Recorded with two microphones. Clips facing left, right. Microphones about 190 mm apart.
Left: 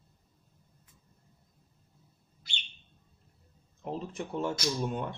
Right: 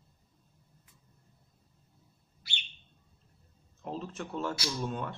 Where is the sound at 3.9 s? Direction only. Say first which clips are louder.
Left 2 dB; 15° left (ahead or behind).